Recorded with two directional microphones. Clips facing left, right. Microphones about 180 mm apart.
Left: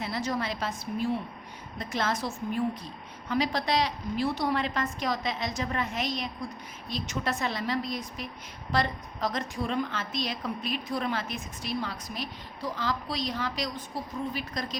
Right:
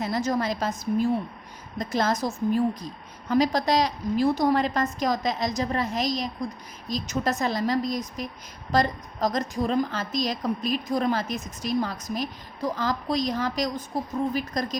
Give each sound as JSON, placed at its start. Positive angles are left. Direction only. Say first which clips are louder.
{"t": 0.0, "sound": "a woman's voice", "louder": "right 5 dB", "side_deg": -45}